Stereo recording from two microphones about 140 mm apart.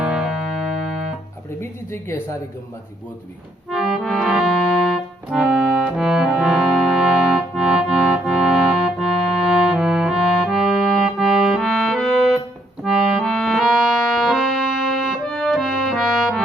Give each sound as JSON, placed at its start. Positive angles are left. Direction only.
{"t": 0.0, "sound": "music", "side_deg": -5}
{"t": 1.9, "sound": "speech", "side_deg": 20}
{"t": 3.7, "sound": "music", "side_deg": 0}